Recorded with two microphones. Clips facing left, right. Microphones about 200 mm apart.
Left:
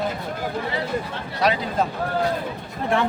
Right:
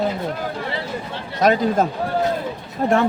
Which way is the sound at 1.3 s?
45° right (ahead or behind).